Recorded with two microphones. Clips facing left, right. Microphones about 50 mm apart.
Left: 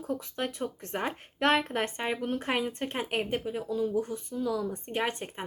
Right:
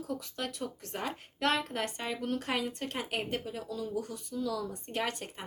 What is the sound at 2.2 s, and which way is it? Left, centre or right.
Speech, left.